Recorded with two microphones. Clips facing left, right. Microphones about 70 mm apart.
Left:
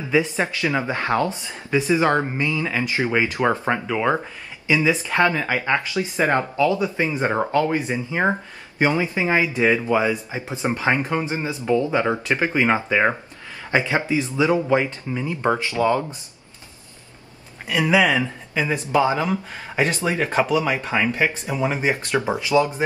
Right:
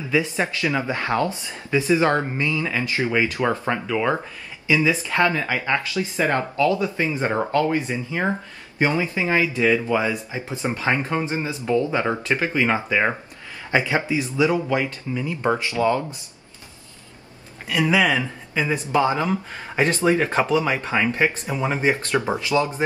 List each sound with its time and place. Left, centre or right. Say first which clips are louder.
0.1 s speech: left 2 dB; left
14.2 s speech: left 1 dB; left
17.6 s speech: left 1 dB; centre
20.0 s speech: right 4 dB; right
20.2 s speech: even; centre